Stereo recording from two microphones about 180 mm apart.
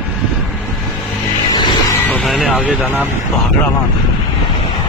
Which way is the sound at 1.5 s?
25° left (ahead or behind).